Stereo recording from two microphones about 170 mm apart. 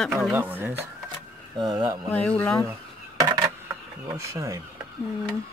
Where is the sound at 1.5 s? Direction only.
25° right (ahead or behind).